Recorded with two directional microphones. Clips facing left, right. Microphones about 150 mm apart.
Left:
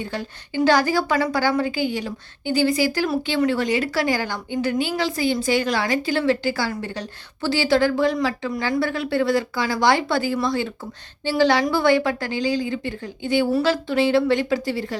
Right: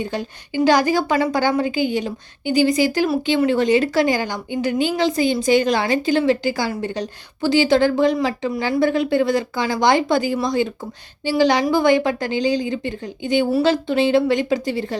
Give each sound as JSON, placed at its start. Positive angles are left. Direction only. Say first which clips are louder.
{"t": 0.0, "sound": "a woman's voice", "louder": "right 4 dB", "side_deg": -15}